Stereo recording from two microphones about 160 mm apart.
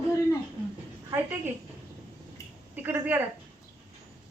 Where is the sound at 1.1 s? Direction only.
15° right (ahead or behind).